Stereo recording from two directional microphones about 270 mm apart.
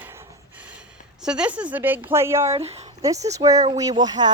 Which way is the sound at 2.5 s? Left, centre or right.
Right.